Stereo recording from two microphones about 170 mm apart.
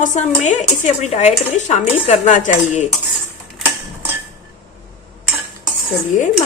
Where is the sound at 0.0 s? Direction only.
45° left (ahead or behind).